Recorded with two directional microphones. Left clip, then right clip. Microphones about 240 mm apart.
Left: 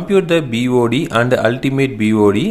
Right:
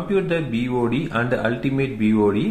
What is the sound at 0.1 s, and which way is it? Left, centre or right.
A man's voice, left.